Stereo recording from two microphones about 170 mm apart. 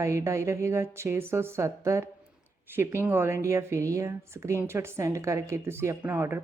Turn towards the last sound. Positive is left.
turn(degrees=-15)  # may be behind; listen again after turning